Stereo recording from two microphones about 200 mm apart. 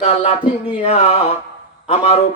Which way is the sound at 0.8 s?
30° left (ahead or behind).